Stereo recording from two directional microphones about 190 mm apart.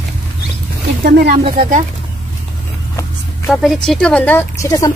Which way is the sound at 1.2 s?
30° right (ahead or behind).